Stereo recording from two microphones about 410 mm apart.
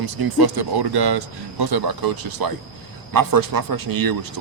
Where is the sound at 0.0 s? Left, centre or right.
Right.